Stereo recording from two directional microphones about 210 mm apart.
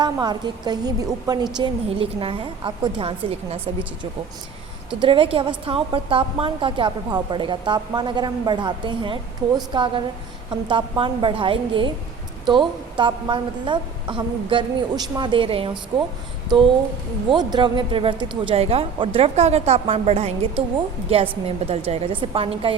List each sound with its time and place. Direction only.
0.0 s speech: 20° right (ahead or behind)
4.9 s speech: 25° right (ahead or behind)
17.2 s speech: 20° right (ahead or behind)